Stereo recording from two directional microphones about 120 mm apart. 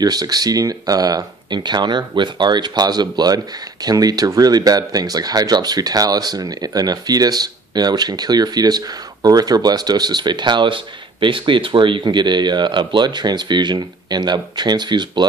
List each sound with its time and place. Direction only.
0.0 s speech: 35° right (ahead or behind)